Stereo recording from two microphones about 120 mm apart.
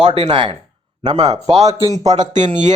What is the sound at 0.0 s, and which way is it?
Speech, 45° right (ahead or behind).